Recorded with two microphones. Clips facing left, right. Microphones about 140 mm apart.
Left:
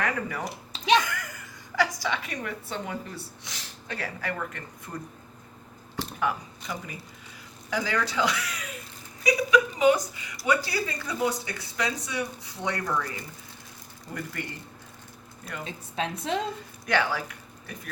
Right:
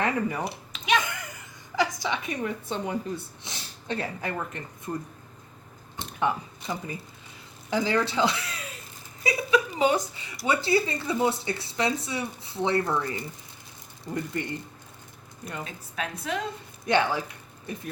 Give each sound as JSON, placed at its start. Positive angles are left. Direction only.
{"t": 0.0, "sound": "speech", "side_deg": -20}
{"t": 0.7, "sound": "a sound", "side_deg": 30}
{"t": 1.0, "sound": "a woman's voice", "side_deg": -20}
{"t": 6.0, "sound": "a woman's voice", "side_deg": -25}
{"t": 14.3, "sound": "speech", "side_deg": -25}
{"t": 15.6, "sound": "a woman's voice", "side_deg": 30}
{"t": 16.8, "sound": "speech", "side_deg": -25}